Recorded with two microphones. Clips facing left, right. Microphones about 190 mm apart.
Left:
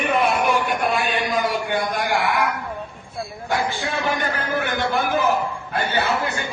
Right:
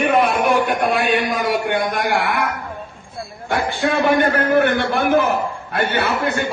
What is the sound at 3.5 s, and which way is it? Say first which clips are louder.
A man's voice: right 5 dB; 60° right (ahead or behind).